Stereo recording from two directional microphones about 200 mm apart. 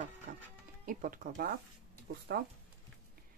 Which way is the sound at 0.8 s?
45° right (ahead or behind).